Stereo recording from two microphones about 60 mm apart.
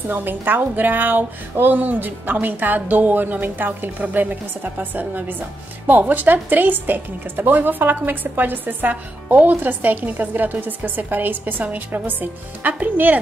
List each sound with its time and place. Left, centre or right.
0.1 s speech: right